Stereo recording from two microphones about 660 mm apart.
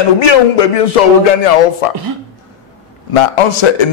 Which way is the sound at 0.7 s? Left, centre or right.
Left.